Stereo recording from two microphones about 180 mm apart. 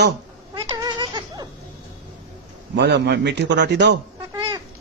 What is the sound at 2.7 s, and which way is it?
A man's voice, 70° right (ahead or behind).